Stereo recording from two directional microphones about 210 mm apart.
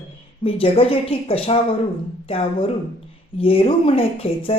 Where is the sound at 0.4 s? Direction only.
25° left (ahead or behind).